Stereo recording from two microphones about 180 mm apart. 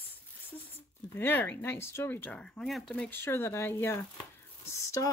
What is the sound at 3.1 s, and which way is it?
Speech, 15° left (ahead or behind).